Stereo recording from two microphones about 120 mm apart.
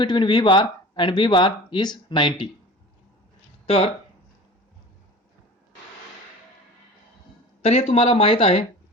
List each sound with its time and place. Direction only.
0.0 s speech: 40° left (ahead or behind)
3.7 s speech: 50° left (ahead or behind)
7.6 s speech: 60° left (ahead or behind)